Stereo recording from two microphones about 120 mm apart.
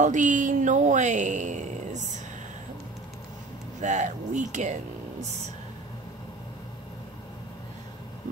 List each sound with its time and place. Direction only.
0.0 s speech: 90° right
3.8 s speech: 85° right